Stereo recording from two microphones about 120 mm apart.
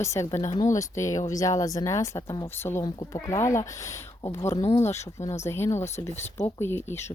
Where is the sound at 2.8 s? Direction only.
30° left (ahead or behind).